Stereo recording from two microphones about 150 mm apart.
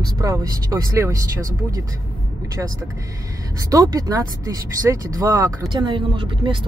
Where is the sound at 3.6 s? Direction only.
25° right (ahead or behind).